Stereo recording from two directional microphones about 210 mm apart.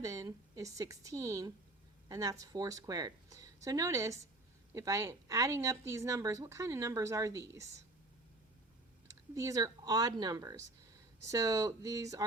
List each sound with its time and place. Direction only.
0.0 s speech: 15° right (ahead or behind)
9.0 s speech: 15° right (ahead or behind)